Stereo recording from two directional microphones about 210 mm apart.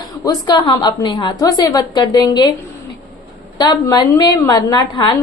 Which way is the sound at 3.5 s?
20° left (ahead or behind).